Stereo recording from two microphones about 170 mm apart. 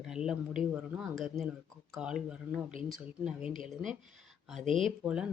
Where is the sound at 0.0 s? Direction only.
5° right (ahead or behind).